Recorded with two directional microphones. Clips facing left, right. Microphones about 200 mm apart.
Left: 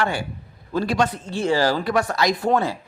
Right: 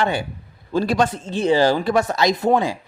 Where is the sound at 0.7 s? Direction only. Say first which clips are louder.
Right 2 dB; 35° right (ahead or behind).